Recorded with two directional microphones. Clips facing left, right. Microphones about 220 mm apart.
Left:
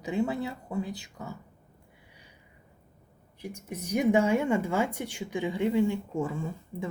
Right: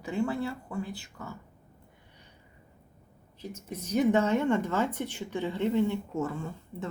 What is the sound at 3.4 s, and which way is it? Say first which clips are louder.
A woman's voice: left 1 dB; 15° left (ahead or behind).